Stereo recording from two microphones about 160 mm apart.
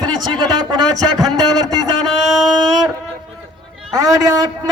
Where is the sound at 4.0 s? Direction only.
20° right (ahead or behind).